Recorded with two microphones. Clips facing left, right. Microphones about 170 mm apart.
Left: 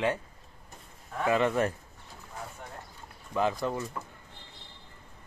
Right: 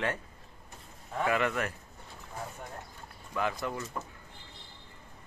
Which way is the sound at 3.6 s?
25° left (ahead or behind).